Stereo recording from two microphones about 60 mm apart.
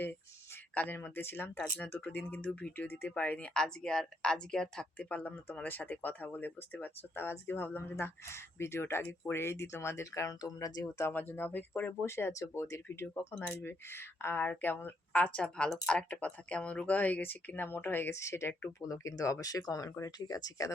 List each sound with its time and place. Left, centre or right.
0.9 s speech: left
1.5 s speech: left
1.9 s speech: left
11.1 s speech: left
11.9 s speech: left
12.3 s speech: left
13.4 s speech: left
13.7 s speech: left
15.4 s speech: centre; by 18.1 s left
18.1 s speech: left
18.8 s speech: left